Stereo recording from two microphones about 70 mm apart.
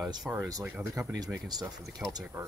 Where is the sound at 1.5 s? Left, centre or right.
Right.